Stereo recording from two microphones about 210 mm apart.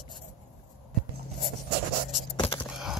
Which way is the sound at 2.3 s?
25° left (ahead or behind).